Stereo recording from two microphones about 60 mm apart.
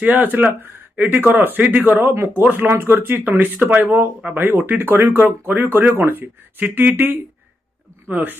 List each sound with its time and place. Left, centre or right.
0.0 s speech: right